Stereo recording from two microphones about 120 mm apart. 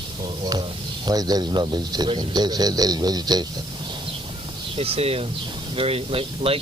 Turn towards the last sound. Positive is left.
turn(degrees=-50)  # may be behind; listen again after turning